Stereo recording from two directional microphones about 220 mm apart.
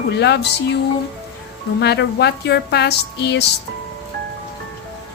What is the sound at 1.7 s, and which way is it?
A woman's voice, 50° left (ahead or behind).